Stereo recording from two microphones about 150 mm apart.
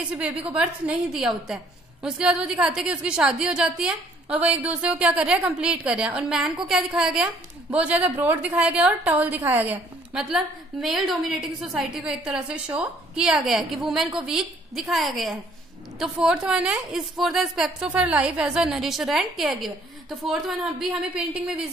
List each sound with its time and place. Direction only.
0.1 s a woman's voice: 5° right (ahead or behind)
21.1 s a woman's voice: 5° right (ahead or behind)